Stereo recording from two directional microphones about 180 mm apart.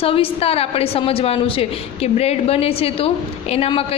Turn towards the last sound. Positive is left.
turn(degrees=35)  # may be behind; listen again after turning